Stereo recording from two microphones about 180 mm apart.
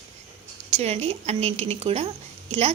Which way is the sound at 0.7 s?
35° right (ahead or behind).